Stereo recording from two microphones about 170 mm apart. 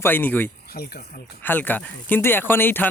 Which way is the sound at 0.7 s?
60° left (ahead or behind).